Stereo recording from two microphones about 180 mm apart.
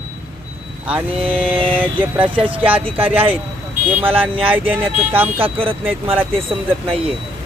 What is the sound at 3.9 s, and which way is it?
Speech, 10° right (ahead or behind).